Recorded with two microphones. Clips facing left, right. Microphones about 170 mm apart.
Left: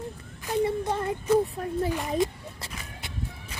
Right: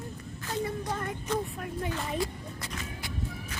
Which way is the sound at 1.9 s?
20° left (ahead or behind).